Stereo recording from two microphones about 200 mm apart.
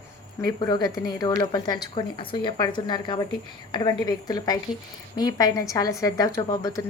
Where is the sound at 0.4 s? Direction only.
20° left (ahead or behind).